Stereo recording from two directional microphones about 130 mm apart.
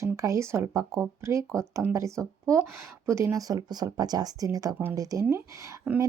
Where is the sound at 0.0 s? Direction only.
25° right (ahead or behind).